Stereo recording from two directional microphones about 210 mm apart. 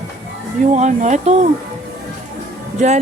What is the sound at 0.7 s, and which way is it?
Speech, 35° right (ahead or behind).